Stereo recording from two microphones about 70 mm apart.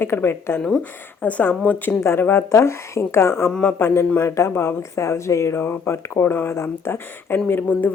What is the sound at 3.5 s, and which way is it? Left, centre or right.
Speech, centre.